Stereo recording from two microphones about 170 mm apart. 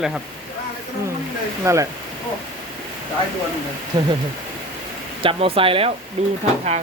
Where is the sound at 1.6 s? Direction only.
20° right (ahead or behind).